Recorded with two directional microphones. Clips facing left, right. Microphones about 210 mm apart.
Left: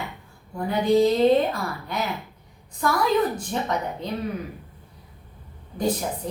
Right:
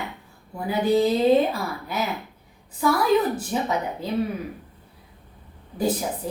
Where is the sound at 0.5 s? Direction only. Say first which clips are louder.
Left 1 dB; 5° right (ahead or behind).